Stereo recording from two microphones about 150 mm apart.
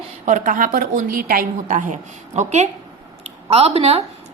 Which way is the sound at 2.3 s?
50° right (ahead or behind).